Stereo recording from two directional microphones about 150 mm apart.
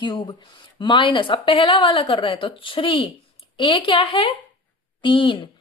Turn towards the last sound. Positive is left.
turn(degrees=35)  # may be behind; listen again after turning